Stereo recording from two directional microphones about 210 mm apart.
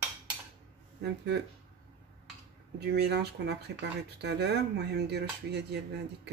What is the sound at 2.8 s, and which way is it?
Speech, 50° right (ahead or behind).